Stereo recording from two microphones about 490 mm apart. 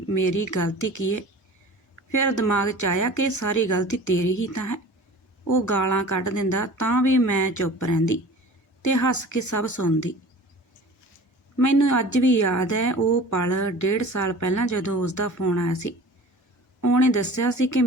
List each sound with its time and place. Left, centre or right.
0.1 s a woman's voice: left
11.5 s a woman's voice: left